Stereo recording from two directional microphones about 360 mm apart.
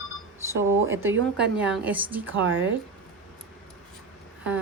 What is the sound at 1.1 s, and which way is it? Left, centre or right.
Speech, right.